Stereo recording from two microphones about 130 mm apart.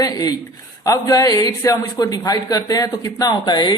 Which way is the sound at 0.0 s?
30° left (ahead or behind).